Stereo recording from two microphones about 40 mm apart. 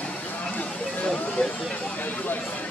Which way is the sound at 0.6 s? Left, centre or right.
Left.